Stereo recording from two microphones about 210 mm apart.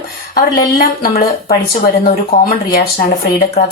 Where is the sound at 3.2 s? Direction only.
45° left (ahead or behind).